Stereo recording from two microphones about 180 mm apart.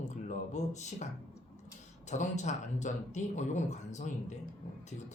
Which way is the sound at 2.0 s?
40° left (ahead or behind).